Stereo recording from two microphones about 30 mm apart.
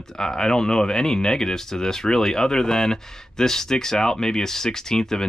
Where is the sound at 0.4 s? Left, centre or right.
Left.